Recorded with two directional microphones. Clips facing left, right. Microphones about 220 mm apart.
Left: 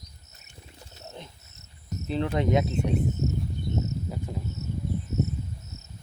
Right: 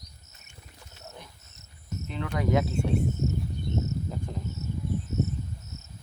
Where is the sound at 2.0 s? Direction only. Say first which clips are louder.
Left 3 dB; 30° left (ahead or behind).